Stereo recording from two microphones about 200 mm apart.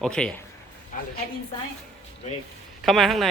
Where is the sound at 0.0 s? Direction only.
5° left (ahead or behind).